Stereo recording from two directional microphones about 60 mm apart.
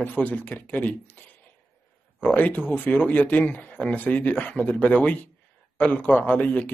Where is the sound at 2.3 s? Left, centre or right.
Left.